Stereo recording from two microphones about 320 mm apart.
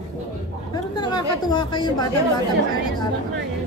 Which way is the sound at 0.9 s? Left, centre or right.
Centre.